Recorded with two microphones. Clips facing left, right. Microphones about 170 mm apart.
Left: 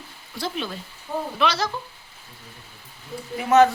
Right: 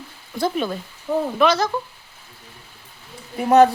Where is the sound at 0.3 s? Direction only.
50° right (ahead or behind).